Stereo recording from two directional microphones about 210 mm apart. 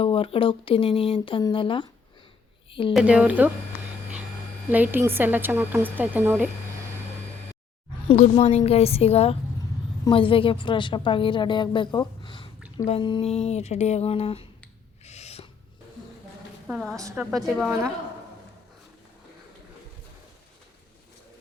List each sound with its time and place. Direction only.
0.0 s a woman's voice: 25° left (ahead or behind)
2.9 s a woman's voice: 5° right (ahead or behind)
4.7 s a woman's voice: 10° right (ahead or behind)
8.0 s a woman's voice: 30° left (ahead or behind)
15.0 s gasp: 30° left (ahead or behind)
16.6 s a woman's voice: centre (ahead or behind)
17.0 s a woman's voice: 15° right (ahead or behind)
17.3 s a woman's voice: centre (ahead or behind)